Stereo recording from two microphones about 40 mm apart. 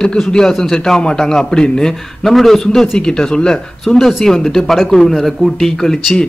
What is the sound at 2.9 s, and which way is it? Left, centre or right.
Speech, centre.